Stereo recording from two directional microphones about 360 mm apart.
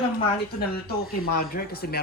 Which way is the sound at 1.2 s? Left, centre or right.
Left.